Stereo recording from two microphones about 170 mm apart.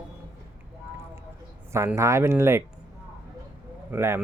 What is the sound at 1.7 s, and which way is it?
Speech, 15° right (ahead or behind).